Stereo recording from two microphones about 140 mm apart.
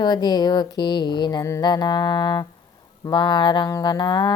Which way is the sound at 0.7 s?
30° left (ahead or behind).